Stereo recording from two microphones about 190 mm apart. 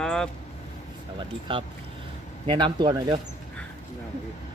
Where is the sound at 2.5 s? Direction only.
25° right (ahead or behind).